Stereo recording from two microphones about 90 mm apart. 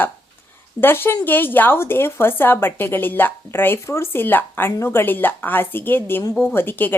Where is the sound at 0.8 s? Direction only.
25° left (ahead or behind).